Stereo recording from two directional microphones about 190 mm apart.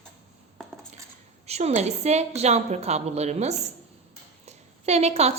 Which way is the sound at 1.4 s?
35° right (ahead or behind).